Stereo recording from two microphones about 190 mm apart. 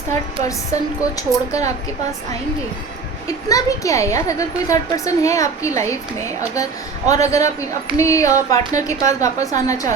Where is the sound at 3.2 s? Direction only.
15° left (ahead or behind).